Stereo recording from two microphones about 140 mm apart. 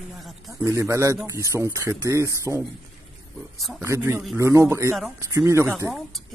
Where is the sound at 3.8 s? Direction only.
20° right (ahead or behind).